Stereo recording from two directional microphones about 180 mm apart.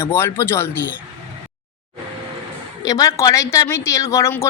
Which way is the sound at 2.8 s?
20° left (ahead or behind).